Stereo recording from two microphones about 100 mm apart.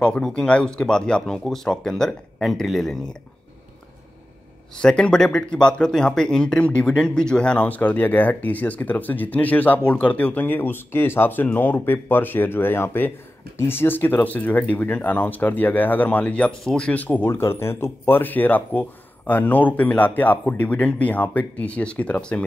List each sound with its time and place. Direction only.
0.0 s speech: 10° left (ahead or behind)
4.7 s speech: 10° left (ahead or behind)